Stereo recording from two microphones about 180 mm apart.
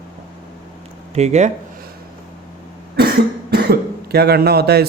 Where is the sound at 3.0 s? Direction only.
60° right (ahead or behind).